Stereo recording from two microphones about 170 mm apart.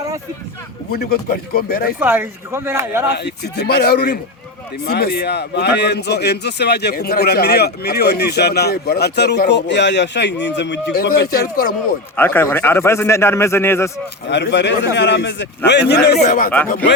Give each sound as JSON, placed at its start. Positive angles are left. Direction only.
{"t": 0.9, "sound": "speech", "side_deg": 65}
{"t": 2.0, "sound": "speech", "side_deg": -10}
{"t": 3.1, "sound": "a man's voice", "side_deg": 75}
{"t": 12.1, "sound": "a man's voice", "side_deg": 10}
{"t": 14.3, "sound": "a man's voice", "side_deg": 90}
{"t": 16.2, "sound": "speech", "side_deg": 55}